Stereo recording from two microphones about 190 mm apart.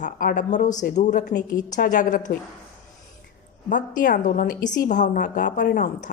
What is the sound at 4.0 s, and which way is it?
A woman's voice, 45° left (ahead or behind).